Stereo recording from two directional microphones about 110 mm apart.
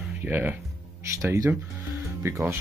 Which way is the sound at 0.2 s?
15° right (ahead or behind).